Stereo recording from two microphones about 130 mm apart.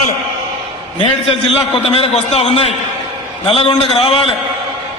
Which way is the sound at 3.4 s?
40° left (ahead or behind).